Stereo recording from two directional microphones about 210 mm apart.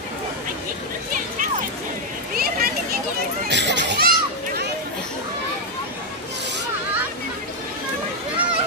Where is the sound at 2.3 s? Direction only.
45° right (ahead or behind).